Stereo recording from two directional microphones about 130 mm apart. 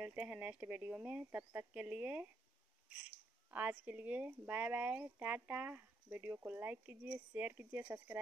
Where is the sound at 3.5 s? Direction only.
10° right (ahead or behind).